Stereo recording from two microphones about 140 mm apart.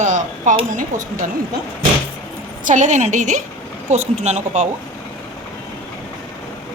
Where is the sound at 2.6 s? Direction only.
60° right (ahead or behind).